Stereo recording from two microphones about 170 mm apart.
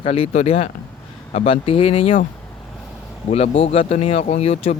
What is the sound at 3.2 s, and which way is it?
Speech, 35° left (ahead or behind).